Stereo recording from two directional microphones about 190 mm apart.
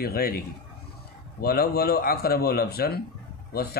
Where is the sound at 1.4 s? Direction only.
55° left (ahead or behind).